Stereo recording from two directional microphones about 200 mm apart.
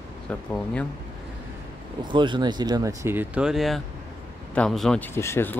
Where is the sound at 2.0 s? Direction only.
25° right (ahead or behind).